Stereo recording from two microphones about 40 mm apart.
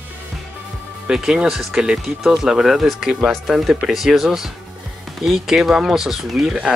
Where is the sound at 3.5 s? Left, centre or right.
Centre.